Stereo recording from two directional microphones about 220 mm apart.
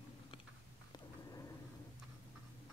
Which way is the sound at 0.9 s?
15° left (ahead or behind).